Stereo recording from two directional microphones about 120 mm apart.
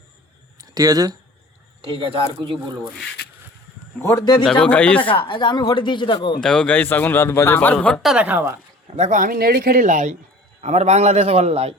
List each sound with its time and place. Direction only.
0.6 s speech: 30° right (ahead or behind)
1.9 s speech: 50° right (ahead or behind)
2.8 s speech: centre (ahead or behind)
4.0 s speech: 30° left (ahead or behind)
4.6 s speech: 10° left (ahead or behind)
5.0 s speech: 45° left (ahead or behind)
6.4 s speech: 5° left (ahead or behind)
8.0 s a woman's voice: 10° right (ahead or behind)
9.0 s a man's voice: 85° right
10.6 s a man's voice: 70° right (ahead or behind)